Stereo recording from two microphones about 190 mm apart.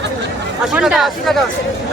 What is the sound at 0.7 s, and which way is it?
Speech, 5° right (ahead or behind).